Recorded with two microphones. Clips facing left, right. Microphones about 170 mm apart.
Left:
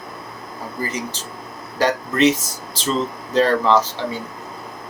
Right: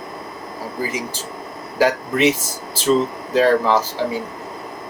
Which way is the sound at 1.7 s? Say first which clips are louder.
Right 1 dB; 5° right (ahead or behind).